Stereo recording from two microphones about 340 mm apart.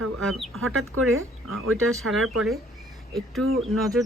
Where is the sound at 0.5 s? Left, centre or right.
Right.